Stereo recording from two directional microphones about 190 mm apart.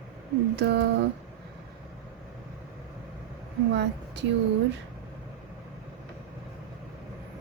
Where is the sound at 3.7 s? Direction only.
65° right (ahead or behind).